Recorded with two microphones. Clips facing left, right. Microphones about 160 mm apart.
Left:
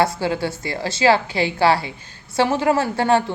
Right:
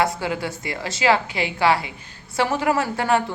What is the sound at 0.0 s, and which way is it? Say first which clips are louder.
A woman's voice: left 3 dB; 30° left (ahead or behind).